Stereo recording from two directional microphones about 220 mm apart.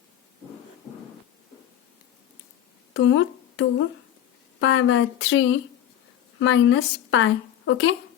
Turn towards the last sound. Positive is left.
turn(degrees=60)  # may be behind; listen again after turning